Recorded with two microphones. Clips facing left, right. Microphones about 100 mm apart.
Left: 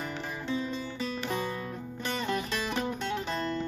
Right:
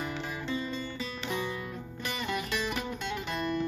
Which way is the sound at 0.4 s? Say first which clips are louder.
Left 3 dB; 10° left (ahead or behind).